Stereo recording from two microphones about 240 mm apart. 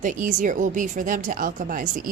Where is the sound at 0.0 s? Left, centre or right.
Right.